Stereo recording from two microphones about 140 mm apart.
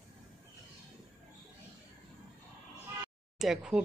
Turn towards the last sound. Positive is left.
turn(degrees=-5)  # may be behind; listen again after turning